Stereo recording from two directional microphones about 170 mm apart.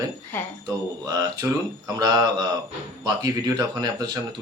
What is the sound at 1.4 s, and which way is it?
Speech, 15° right (ahead or behind).